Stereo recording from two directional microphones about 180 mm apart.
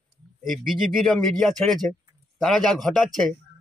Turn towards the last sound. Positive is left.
turn(degrees=0)  # may be behind; listen again after turning